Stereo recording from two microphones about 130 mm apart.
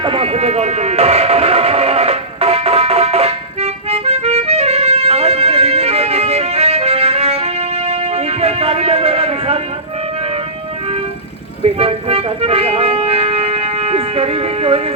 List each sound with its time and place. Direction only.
0.0 s music: 45° right (ahead or behind)
11.6 s music: 50° right (ahead or behind)